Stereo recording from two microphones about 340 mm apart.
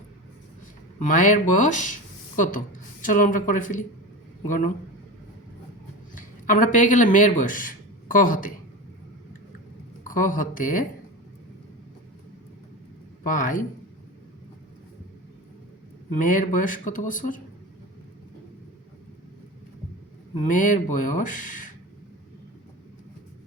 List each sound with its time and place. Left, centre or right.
0.9 s speech: left
6.1 s speech: left
10.1 s speech: left
13.2 s speech: left
16.1 s speech: left
20.5 s speech: left